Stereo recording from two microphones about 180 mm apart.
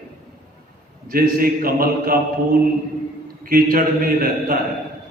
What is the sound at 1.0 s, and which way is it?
A man's voice, 55° right (ahead or behind).